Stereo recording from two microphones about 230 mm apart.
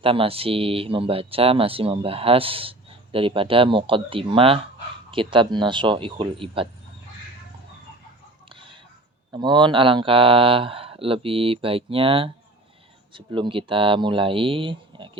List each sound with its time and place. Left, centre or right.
0.0 s speech: right
9.3 s speech: centre